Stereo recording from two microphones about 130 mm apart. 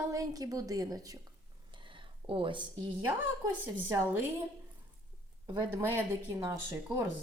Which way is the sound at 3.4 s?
20° right (ahead or behind).